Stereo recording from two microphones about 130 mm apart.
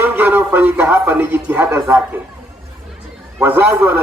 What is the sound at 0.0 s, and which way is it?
Speech, 15° right (ahead or behind).